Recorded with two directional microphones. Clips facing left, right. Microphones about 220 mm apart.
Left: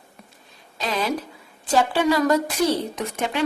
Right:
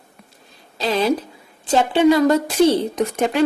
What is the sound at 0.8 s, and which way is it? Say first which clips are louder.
A woman's voice: right 6 dB; 30° right (ahead or behind).